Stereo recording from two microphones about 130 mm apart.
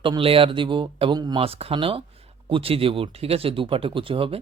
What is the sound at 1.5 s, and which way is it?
Speech, 50° right (ahead or behind).